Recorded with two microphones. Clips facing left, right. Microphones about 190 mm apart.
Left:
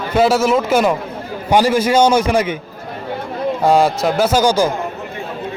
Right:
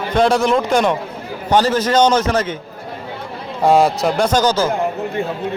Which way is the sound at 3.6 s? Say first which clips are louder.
Right 1 dB; centre (ahead or behind).